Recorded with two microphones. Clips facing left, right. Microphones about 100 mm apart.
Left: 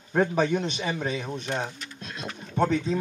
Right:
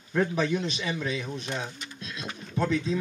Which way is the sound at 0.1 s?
45° left (ahead or behind).